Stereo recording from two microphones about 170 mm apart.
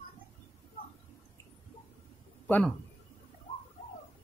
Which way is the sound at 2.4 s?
10° left (ahead or behind).